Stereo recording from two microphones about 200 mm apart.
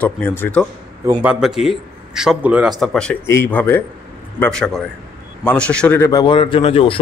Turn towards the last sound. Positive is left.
turn(degrees=30)  # may be behind; listen again after turning